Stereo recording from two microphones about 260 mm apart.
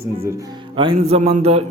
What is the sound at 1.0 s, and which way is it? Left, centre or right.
Speech, right.